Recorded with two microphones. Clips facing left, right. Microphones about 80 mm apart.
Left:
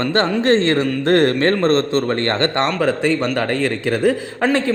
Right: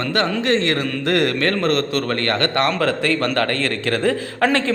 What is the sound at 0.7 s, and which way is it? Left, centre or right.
Speech, centre.